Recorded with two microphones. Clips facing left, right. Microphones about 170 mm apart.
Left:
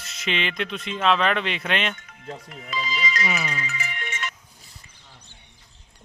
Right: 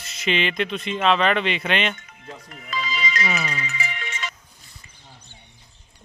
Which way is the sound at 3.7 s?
55° left (ahead or behind).